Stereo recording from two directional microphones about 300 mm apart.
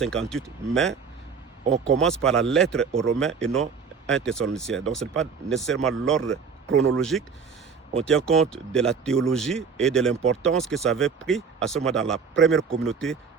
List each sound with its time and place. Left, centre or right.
0.0 s speech: centre
2.0 s speech: centre
6.7 s speech: right
6.9 s speech: centre